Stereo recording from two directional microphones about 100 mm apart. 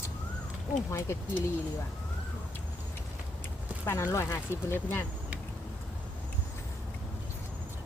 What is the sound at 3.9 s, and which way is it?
Speech, 30° left (ahead or behind).